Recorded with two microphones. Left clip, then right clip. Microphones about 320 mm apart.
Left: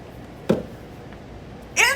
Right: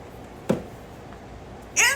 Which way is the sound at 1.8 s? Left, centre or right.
Centre.